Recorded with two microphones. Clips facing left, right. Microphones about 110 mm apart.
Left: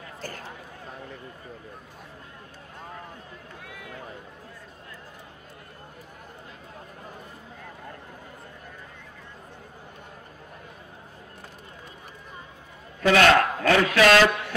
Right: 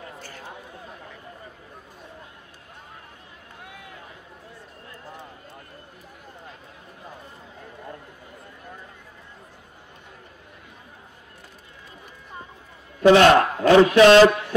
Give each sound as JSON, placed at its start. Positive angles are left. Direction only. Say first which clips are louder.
{"t": 13.0, "sound": "a man's voice", "louder": "right 5 dB", "side_deg": -25}